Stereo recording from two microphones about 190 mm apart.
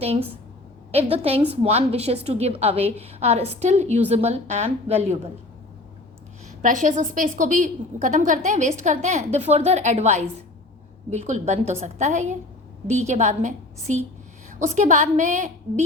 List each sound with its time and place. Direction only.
0.9 s a woman's voice: 30° right (ahead or behind)
6.6 s a woman's voice: 45° right (ahead or behind)